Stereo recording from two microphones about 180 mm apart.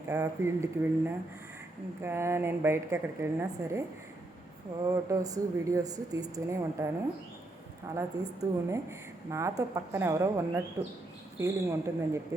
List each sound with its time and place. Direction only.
0.1 s a woman's voice: 15° right (ahead or behind)
4.9 s speech: 20° right (ahead or behind)
7.9 s a woman's voice: 15° right (ahead or behind)